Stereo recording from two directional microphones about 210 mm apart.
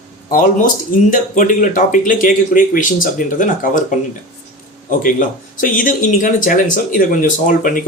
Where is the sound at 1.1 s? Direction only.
40° left (ahead or behind).